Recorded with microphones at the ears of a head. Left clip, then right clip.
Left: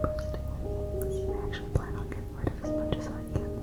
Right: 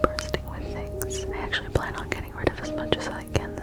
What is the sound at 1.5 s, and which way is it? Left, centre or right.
Whispering, right.